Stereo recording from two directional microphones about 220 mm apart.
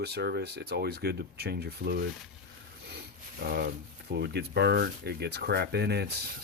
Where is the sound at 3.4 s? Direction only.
40° right (ahead or behind).